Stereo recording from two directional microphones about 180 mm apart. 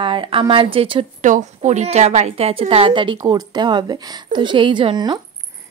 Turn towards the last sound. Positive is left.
turn(degrees=-25)  # may be behind; listen again after turning